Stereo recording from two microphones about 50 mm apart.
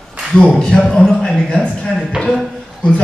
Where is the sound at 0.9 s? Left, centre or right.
Centre.